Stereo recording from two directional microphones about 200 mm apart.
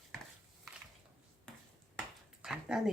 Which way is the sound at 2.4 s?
5° right (ahead or behind).